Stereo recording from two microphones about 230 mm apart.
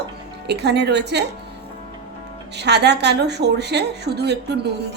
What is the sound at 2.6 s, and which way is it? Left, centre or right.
A woman's voice, right.